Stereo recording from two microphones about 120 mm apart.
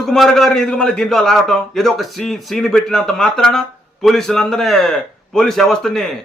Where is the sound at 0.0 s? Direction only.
Centre (ahead or behind).